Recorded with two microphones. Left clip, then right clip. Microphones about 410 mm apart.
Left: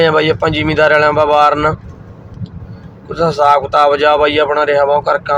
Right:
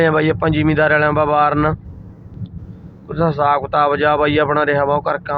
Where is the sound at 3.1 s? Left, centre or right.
Right.